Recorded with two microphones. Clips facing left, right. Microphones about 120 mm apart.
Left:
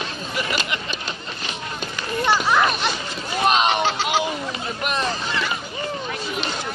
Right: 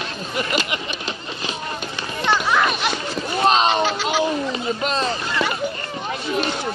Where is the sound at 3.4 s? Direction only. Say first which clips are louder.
Right 2 dB; 30° right (ahead or behind).